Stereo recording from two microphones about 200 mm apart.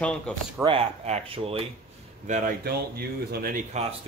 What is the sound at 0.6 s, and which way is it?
Speech, 30° right (ahead or behind).